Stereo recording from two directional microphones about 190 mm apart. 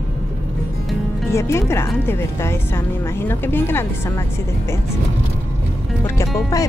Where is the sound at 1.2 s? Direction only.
15° left (ahead or behind).